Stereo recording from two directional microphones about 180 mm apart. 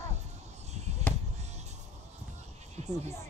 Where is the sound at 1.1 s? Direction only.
10° left (ahead or behind).